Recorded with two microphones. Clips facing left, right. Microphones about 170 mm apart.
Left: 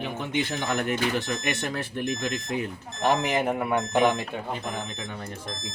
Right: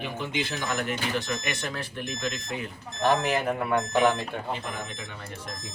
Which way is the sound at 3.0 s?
15° left (ahead or behind).